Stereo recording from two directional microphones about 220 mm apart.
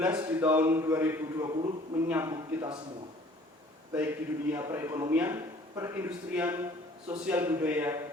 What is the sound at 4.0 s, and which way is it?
A man's voice, 10° right (ahead or behind).